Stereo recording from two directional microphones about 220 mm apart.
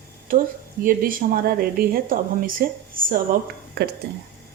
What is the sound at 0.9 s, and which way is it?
A woman's voice, 40° right (ahead or behind).